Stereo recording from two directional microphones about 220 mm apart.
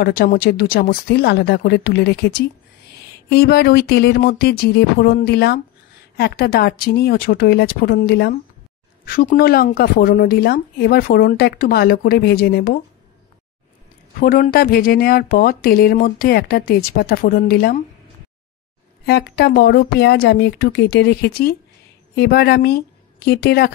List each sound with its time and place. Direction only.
0.0 s a woman's voice: 40° left (ahead or behind)
14.2 s speech: 40° left (ahead or behind)
19.0 s a woman's voice: 50° left (ahead or behind)